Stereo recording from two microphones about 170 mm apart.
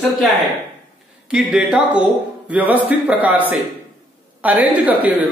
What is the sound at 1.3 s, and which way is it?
Speech, 5° right (ahead or behind).